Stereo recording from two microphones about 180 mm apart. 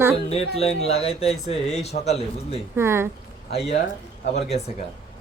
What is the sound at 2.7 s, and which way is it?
Speech, 15° right (ahead or behind).